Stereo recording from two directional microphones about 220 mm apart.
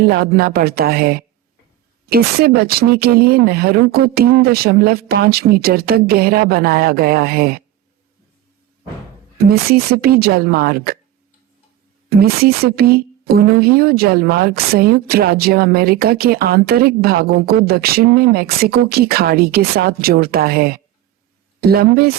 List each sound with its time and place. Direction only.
0.0 s a woman's voice: 45° right (ahead or behind)
9.4 s a woman's voice: 45° right (ahead or behind)
12.0 s a woman's voice: 45° right (ahead or behind)